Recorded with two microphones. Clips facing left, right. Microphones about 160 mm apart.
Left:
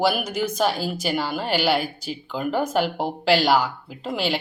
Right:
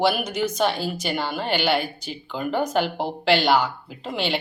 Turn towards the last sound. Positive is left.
turn(degrees=5)  # may be behind; listen again after turning